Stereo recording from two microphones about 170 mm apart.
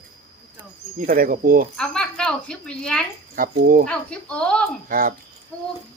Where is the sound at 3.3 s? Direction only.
55° right (ahead or behind).